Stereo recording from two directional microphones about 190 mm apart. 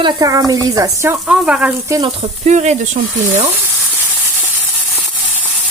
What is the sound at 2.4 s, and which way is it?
Speech, 35° right (ahead or behind).